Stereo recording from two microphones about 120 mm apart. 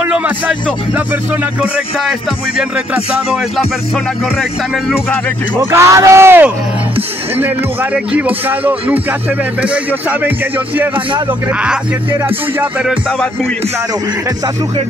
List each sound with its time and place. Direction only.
0.0 s speech: 10° right (ahead or behind)
3.5 s music: centre (ahead or behind)
5.6 s speech: 25° right (ahead or behind)